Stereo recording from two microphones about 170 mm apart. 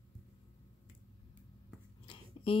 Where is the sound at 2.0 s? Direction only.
30° left (ahead or behind).